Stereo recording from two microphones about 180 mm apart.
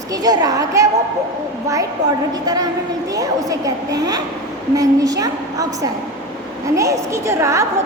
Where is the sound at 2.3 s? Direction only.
20° right (ahead or behind).